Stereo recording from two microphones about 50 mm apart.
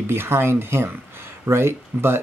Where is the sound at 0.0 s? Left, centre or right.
Right.